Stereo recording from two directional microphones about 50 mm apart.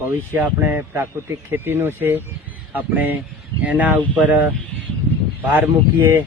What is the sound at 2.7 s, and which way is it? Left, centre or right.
Speech, right.